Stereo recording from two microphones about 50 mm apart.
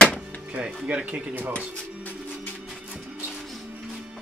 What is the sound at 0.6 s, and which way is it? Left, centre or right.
Speech, right.